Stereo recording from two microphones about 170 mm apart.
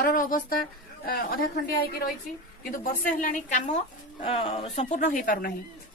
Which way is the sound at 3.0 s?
50° left (ahead or behind).